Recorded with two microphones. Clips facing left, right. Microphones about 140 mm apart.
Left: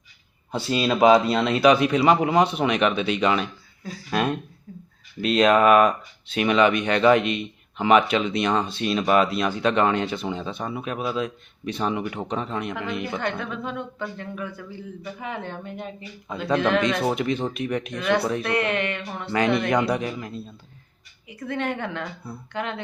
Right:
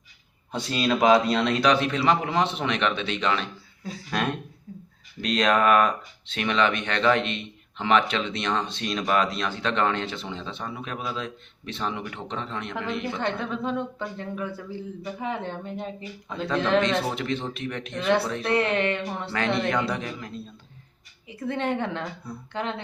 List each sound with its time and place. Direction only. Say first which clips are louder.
0.5 s speech: left 2 dB; 5° left (ahead or behind)
4.7 s a sound: right 1 dB; 15° right (ahead or behind)
5.2 s speech: left 4 dB; 5° left (ahead or behind)
13.1 s speech: even; 30° right (ahead or behind)
16.3 s speech: left 2 dB; 5° left (ahead or behind)
18.4 s speech: right 1 dB; 30° right (ahead or behind)
19.3 s speech: left 5 dB; 10° left (ahead or behind)
21.2 s speech: right 1 dB; 30° right (ahead or behind)
22.3 s speech: even; 5° left (ahead or behind)